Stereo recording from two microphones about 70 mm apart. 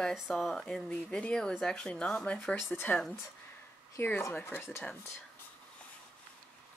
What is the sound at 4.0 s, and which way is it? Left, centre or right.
Speech, left.